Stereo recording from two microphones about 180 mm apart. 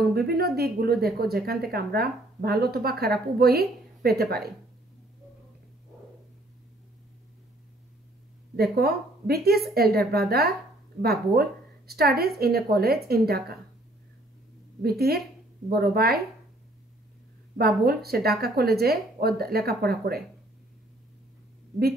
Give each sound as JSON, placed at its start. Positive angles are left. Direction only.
{"t": 0.0, "sound": "a woman's voice", "side_deg": -60}
{"t": 8.7, "sound": "a woman's voice", "side_deg": -60}
{"t": 14.8, "sound": "a woman's voice", "side_deg": -60}
{"t": 17.6, "sound": "a woman's voice", "side_deg": -60}